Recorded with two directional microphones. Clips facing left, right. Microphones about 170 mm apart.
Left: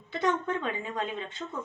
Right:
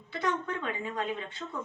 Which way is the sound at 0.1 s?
25° left (ahead or behind).